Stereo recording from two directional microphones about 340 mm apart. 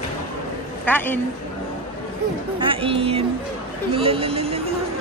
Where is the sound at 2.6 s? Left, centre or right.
Centre.